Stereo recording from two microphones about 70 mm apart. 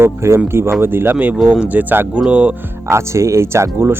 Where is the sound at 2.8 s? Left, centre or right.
Right.